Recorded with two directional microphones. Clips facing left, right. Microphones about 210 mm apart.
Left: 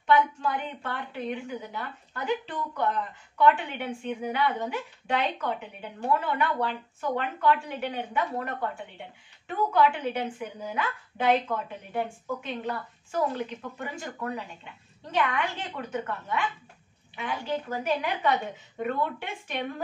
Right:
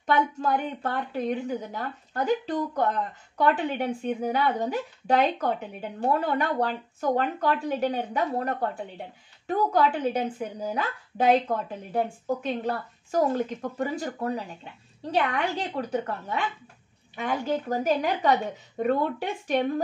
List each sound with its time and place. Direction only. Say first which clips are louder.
0.0 s a woman's voice: left 1 dB; 40° right (ahead or behind)